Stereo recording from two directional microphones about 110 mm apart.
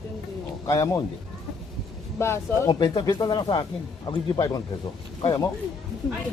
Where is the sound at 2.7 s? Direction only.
45° left (ahead or behind).